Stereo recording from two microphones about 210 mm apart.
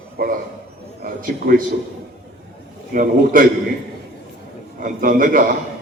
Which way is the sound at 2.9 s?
40° right (ahead or behind).